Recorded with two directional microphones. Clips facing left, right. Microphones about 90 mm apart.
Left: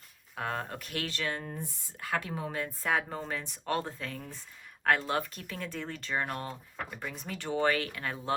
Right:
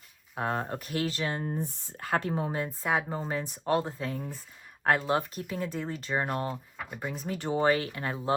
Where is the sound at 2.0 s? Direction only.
40° right (ahead or behind).